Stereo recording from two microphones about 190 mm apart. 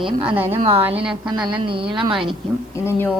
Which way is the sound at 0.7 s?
10° right (ahead or behind).